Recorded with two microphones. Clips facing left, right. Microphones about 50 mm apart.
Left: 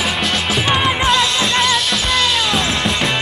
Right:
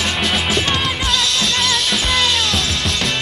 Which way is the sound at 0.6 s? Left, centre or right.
Centre.